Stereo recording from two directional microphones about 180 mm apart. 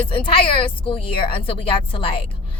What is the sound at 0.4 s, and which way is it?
A woman's voice, 30° left (ahead or behind).